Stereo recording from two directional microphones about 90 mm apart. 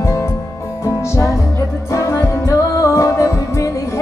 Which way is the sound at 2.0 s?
35° left (ahead or behind).